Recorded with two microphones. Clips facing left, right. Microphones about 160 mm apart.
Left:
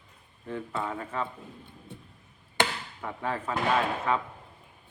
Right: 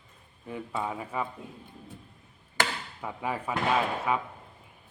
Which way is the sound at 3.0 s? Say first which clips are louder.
Even; 10° right (ahead or behind).